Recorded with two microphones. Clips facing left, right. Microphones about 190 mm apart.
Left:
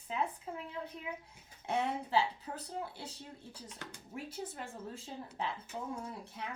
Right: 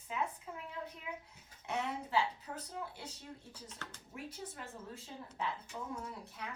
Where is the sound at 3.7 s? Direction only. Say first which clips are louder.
Left 1 dB; 15° left (ahead or behind).